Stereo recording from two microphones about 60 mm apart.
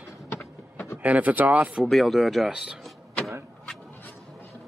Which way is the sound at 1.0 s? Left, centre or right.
Right.